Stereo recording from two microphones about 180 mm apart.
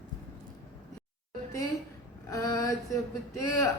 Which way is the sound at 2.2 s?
20° left (ahead or behind).